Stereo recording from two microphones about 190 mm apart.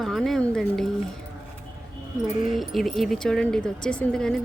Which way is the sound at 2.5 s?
Centre (ahead or behind).